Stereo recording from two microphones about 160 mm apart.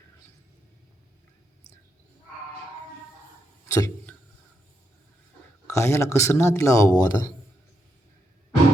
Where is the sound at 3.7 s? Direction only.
20° left (ahead or behind).